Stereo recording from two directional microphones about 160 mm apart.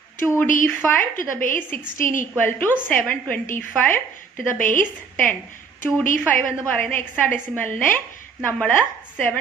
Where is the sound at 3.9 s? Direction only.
10° left (ahead or behind).